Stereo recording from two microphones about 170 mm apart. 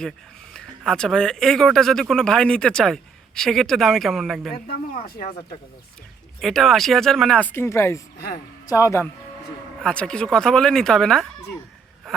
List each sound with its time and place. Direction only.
0.5 s speech: 5° left (ahead or behind)
4.6 s speech: 60° left (ahead or behind)
6.4 s speech: centre (ahead or behind); by 9.0 s 15° left (ahead or behind)
9.8 s speech: 5° left (ahead or behind)